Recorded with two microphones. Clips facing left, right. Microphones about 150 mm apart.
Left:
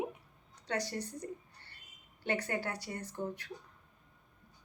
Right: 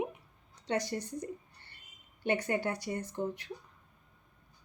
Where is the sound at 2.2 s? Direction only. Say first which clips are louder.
Right 4 dB; 15° right (ahead or behind).